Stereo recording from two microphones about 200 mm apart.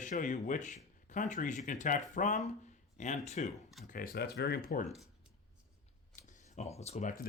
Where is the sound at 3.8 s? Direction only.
45° left (ahead or behind).